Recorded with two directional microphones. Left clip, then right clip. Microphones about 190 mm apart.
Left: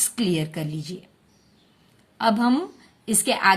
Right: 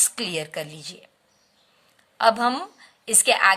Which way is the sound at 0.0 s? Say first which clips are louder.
Left 1 dB; 35° right (ahead or behind).